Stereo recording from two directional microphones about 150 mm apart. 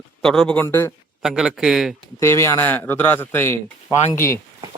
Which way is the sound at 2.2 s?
15° left (ahead or behind).